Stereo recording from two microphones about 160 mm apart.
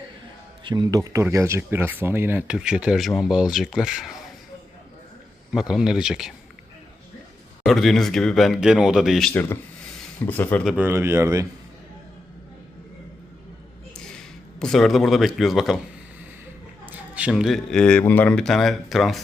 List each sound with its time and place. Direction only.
0.6 s speech: 25° right (ahead or behind); by 4.2 s 5° right (ahead or behind)
5.5 s speech: 5° right (ahead or behind)
7.6 s speech: centre (ahead or behind)
9.3 s speech: 15° left (ahead or behind)
10.7 s speech: 10° right (ahead or behind)
13.9 s a sound: 5° left (ahead or behind)
14.6 s speech: centre (ahead or behind)
16.8 s speech: 10° right (ahead or behind)